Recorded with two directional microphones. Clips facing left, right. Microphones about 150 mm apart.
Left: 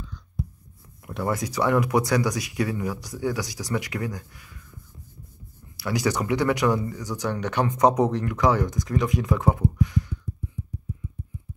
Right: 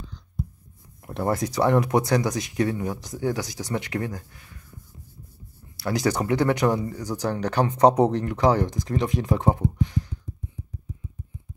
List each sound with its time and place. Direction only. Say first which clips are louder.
1.3 s speech: right 2 dB; 30° right (ahead or behind)
5.9 s speech: right 1 dB; 30° right (ahead or behind)